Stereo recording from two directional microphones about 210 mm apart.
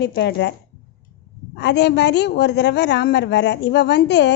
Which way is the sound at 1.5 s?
55° left (ahead or behind).